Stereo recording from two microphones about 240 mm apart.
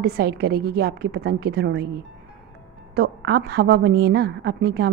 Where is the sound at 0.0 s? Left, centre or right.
Right.